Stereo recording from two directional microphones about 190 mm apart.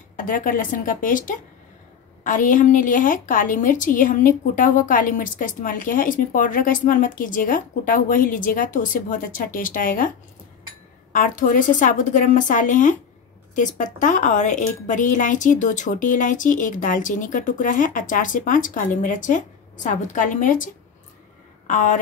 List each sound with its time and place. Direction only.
0.1 s a woman's voice: 45° left (ahead or behind)
11.1 s a woman's voice: 45° left (ahead or behind)
13.9 s a woman's voice: 40° left (ahead or behind)